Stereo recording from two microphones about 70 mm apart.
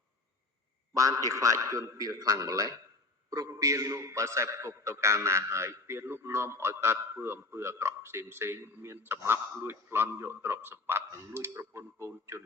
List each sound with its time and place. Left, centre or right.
0.9 s a man's voice: right